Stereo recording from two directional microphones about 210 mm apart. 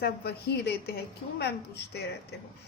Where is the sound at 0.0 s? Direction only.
50° left (ahead or behind).